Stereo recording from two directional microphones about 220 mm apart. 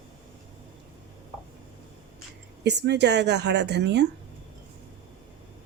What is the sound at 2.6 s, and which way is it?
A woman's voice, 50° right (ahead or behind).